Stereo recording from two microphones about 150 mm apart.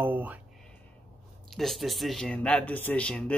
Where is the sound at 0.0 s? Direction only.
10° right (ahead or behind).